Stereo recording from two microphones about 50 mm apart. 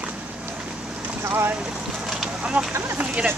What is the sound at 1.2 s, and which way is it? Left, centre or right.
Vehicle, right.